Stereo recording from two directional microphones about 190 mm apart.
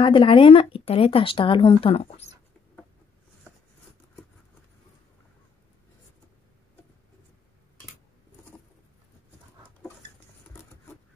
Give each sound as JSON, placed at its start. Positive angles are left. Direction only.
{"t": 0.0, "sound": "speech", "side_deg": 25}